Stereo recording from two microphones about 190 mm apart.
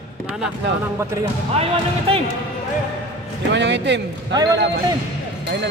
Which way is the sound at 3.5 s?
65° right (ahead or behind).